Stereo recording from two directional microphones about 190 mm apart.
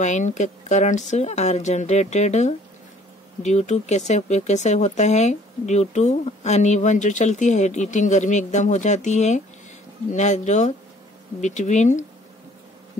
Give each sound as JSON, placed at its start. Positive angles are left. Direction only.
{"t": 0.0, "sound": "speech", "side_deg": 40}